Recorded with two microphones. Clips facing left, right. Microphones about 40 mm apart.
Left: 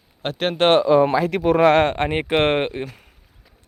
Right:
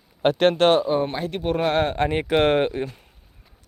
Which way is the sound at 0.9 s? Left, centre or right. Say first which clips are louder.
Left 7 dB; left.